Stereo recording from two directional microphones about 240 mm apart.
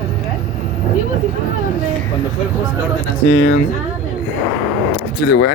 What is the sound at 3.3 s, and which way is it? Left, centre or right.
Speech, left.